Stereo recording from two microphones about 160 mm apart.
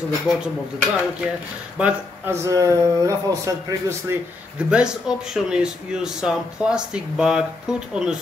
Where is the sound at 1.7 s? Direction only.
10° right (ahead or behind).